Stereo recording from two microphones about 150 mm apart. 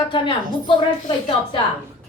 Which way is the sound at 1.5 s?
35° left (ahead or behind).